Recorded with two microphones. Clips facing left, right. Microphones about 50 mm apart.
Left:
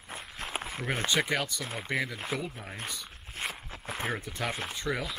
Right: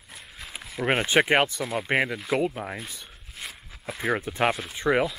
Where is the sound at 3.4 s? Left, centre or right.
Left.